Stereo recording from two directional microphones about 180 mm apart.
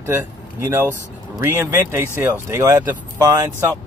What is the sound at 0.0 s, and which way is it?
Speech, 10° right (ahead or behind).